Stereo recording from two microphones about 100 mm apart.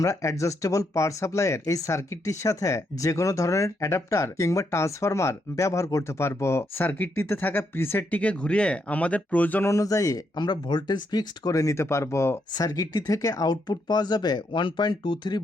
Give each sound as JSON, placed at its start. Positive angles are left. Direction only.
{"t": 0.0, "sound": "speech", "side_deg": 30}
{"t": 9.6, "sound": "speech", "side_deg": 35}
{"t": 12.5, "sound": "speech", "side_deg": 35}